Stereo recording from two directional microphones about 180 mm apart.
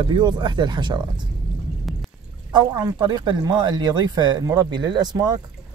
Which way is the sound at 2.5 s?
20° right (ahead or behind).